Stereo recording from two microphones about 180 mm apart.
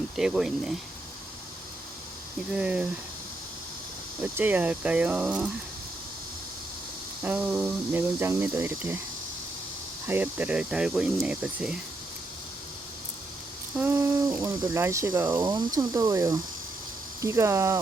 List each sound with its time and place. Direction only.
0.2 s speech: 5° right (ahead or behind)
2.5 s speech: 5° right (ahead or behind)
4.2 s speech: 10° right (ahead or behind)
7.3 s speech: 10° right (ahead or behind)
10.1 s speech: 10° right (ahead or behind)
13.7 s speech: 15° right (ahead or behind)